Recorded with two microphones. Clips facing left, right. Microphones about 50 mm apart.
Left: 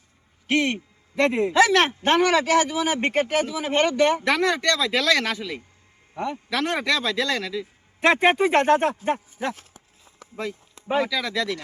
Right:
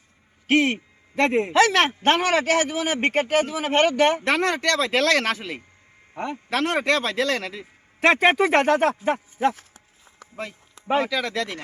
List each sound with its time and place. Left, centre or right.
0.4 s speech: right
1.1 s speech: right
2.0 s a man's voice: right
4.4 s a man's voice: right
8.4 s speech: right
10.8 s speech: right